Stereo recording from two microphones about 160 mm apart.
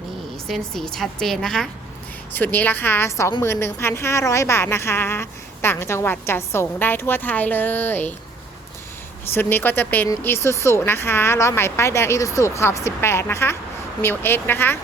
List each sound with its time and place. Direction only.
0.4 s a woman's voice: centre (ahead or behind)
9.3 s a woman's voice: 15° left (ahead or behind)